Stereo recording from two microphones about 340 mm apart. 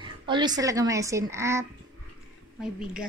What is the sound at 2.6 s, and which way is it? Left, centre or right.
Speech, centre.